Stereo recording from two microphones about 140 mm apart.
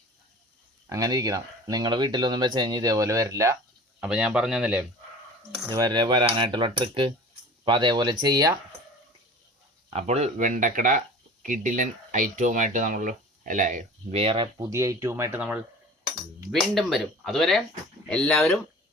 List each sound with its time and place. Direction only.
0.9 s speech: 25° right (ahead or behind)
4.0 s speech: 5° right (ahead or behind)
5.6 s speech: 30° right (ahead or behind)
9.9 s speech: 50° right (ahead or behind)
14.1 s speech: 45° right (ahead or behind)
14.7 s speech: 25° right (ahead or behind)
16.5 s speech: centre (ahead or behind)